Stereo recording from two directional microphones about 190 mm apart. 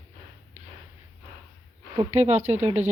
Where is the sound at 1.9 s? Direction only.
35° right (ahead or behind).